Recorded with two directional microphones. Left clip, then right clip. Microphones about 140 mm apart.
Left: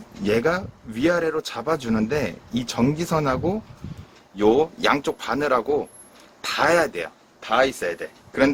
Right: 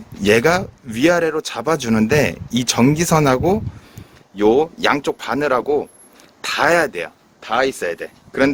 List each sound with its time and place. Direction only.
0.2 s a man's voice: 85° right
4.4 s speech: 50° right (ahead or behind); by 8.5 s 90° right